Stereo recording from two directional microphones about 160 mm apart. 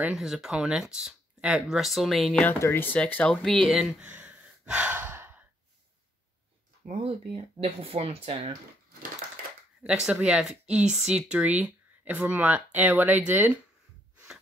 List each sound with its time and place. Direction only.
0.0 s speech: 5° right (ahead or behind)
2.4 s speech: 15° left (ahead or behind)
4.0 s gasp: 10° right (ahead or behind)
6.9 s speech: 40° right (ahead or behind)
10.1 s speech: 5° right (ahead or behind)
14.1 s snort: 5° right (ahead or behind)